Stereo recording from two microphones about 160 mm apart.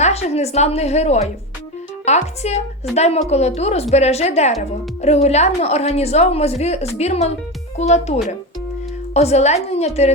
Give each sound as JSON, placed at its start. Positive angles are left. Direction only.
{"t": 0.0, "sound": "a woman's voice", "side_deg": 40}